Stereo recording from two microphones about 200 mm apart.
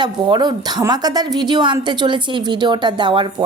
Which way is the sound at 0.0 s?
20° right (ahead or behind).